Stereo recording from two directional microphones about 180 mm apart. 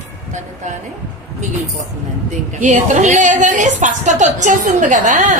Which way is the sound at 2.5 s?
45° right (ahead or behind).